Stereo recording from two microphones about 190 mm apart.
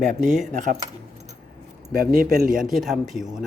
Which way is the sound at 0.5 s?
40° right (ahead or behind).